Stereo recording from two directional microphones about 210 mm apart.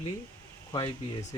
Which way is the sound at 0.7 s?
20° left (ahead or behind).